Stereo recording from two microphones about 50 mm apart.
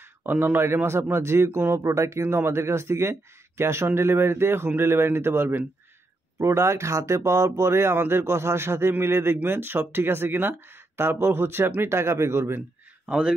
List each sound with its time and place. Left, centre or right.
0.2 s speech: right
1.8 s speech: right
2.2 s speech: right
6.4 s speech: right